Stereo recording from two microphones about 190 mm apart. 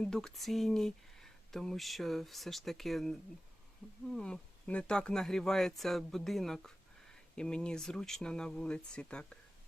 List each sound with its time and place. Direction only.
0.0 s speech: centre (ahead or behind)